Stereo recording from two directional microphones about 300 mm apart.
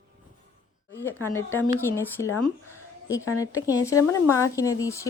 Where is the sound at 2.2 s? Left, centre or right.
Left.